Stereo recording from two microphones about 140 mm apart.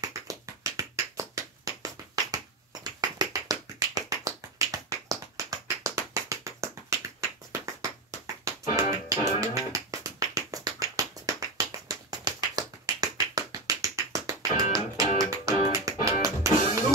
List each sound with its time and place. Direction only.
0.0 s tap: 25° right (ahead or behind)